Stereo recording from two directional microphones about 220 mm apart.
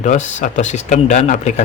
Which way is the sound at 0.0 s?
35° left (ahead or behind).